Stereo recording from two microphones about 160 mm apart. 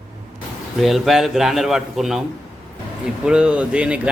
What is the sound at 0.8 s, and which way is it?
A man's voice, centre (ahead or behind).